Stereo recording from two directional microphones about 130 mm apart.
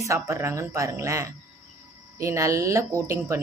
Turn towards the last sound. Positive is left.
turn(degrees=-25)  # may be behind; listen again after turning